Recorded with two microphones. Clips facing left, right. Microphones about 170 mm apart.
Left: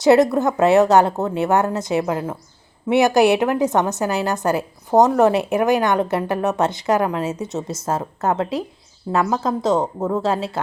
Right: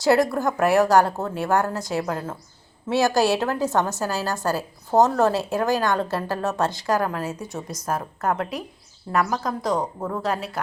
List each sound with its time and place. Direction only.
0.0 s a woman's voice: 20° left (ahead or behind)